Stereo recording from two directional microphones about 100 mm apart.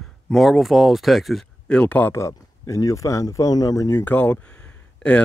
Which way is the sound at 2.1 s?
30° left (ahead or behind).